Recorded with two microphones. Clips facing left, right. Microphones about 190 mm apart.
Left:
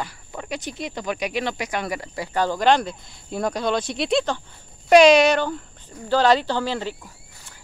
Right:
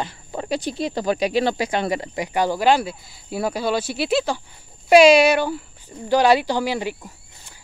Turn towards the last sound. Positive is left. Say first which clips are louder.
# right 2 dB
turn(degrees=-10)  # may be behind; listen again after turning